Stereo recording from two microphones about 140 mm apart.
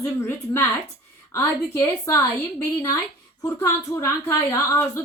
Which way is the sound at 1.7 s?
20° left (ahead or behind).